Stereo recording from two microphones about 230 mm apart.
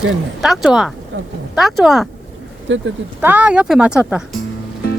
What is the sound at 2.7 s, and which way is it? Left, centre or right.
Speech, right.